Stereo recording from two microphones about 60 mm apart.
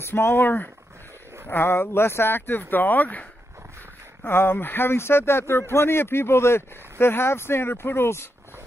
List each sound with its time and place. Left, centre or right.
0.0 s speech: left
4.3 s speech: left